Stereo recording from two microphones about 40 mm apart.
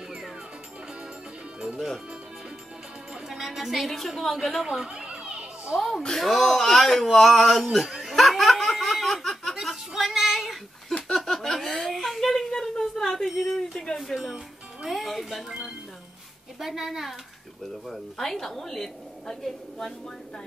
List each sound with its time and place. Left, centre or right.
3.3 s a woman's voice: centre
4.8 s children playing: right
5.8 s speech: centre
7.9 s laughter: centre
9.9 s a sound: centre
13.6 s speech: centre
14.1 s a child's voice: centre
17.6 s a woman's voice: centre